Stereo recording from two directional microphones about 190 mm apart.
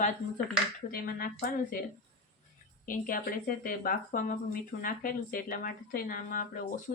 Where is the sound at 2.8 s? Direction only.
45° left (ahead or behind).